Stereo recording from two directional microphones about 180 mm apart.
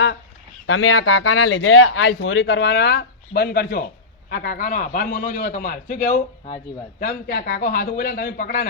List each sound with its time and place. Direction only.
0.7 s a man's voice: 90° left; by 8.6 s 55° left (ahead or behind)